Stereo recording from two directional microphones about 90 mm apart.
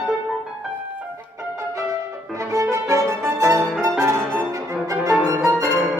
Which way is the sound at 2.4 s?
35° right (ahead or behind).